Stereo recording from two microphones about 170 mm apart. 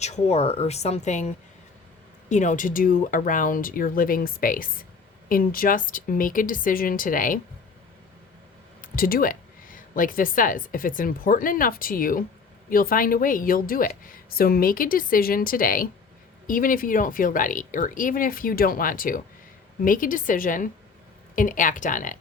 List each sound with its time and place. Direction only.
0.0 s speech: 40° left (ahead or behind)
2.3 s speech: 45° left (ahead or behind)
8.8 s speech: 60° left (ahead or behind)